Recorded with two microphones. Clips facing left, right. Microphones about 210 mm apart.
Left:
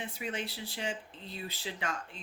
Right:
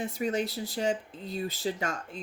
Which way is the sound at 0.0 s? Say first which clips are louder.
Right 8 dB; 40° right (ahead or behind).